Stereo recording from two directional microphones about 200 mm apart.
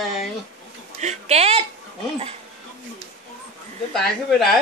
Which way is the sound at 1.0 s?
35° right (ahead or behind).